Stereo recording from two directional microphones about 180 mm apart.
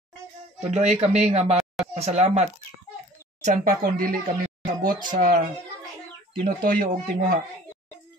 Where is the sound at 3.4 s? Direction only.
50° right (ahead or behind).